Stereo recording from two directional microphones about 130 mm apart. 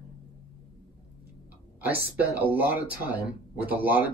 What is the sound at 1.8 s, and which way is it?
Speech, 15° right (ahead or behind).